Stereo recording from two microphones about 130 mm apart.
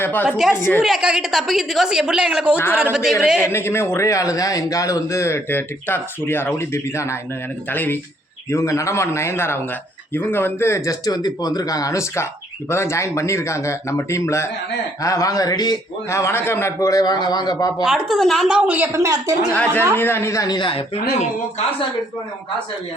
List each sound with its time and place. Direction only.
0.0 s speech: 15° left (ahead or behind)
0.3 s a woman's voice: 5° right (ahead or behind)
3.5 s speech: 20° left (ahead or behind)
17.8 s a woman's voice: centre (ahead or behind)
18.9 s a woman's voice: 25° right (ahead or behind)
19.5 s speech: 10° left (ahead or behind); by 21.2 s 50° left (ahead or behind)